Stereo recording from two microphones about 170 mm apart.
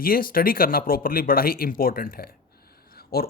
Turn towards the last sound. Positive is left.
turn(degrees=60)  # may be behind; listen again after turning